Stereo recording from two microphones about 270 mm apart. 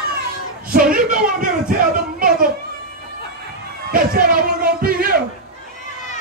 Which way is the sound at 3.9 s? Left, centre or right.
Right.